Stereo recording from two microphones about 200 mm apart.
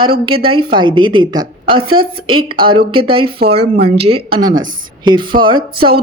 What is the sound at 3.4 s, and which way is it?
Speech, 50° right (ahead or behind).